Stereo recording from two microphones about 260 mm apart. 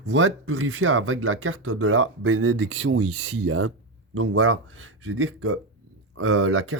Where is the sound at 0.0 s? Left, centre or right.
Right.